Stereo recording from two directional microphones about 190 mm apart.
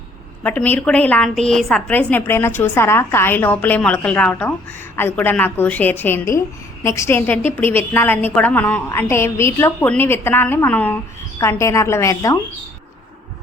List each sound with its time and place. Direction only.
0.4 s a woman's voice: 10° left (ahead or behind)